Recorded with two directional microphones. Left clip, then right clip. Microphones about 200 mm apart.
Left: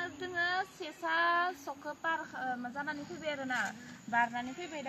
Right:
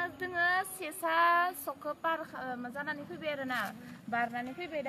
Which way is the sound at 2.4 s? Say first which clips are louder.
Left 2 dB; 15° right (ahead or behind).